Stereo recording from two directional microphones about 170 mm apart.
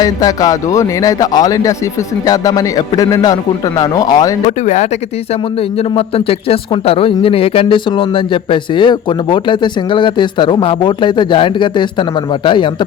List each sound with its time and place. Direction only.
0.0 s speech: 20° left (ahead or behind)
4.4 s speech: 45° left (ahead or behind); by 12.7 s 30° left (ahead or behind)